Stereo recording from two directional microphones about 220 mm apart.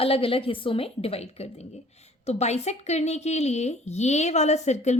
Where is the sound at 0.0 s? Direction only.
25° left (ahead or behind).